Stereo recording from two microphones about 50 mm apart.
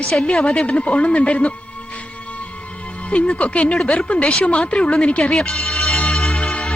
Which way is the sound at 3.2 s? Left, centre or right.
Left.